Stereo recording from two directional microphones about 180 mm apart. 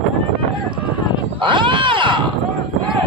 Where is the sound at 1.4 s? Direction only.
25° right (ahead or behind).